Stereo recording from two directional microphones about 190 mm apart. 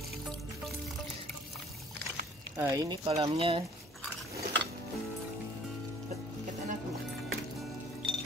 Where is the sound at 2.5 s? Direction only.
15° right (ahead or behind).